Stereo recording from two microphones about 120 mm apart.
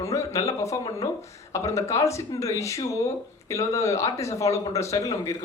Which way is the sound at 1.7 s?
25° left (ahead or behind).